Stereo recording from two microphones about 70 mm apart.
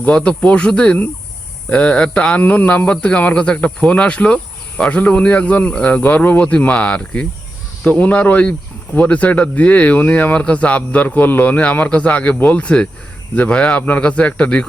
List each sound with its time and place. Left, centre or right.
0.0 s speech: centre
2.4 s speech: left